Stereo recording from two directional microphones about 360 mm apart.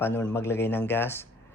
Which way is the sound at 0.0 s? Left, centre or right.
Centre.